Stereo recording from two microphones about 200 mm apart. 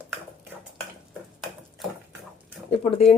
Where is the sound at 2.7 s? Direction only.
30° left (ahead or behind).